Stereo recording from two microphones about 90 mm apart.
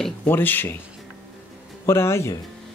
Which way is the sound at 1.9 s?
30° left (ahead or behind).